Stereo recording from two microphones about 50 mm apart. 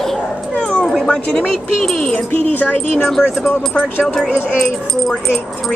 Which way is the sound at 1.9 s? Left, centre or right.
Centre.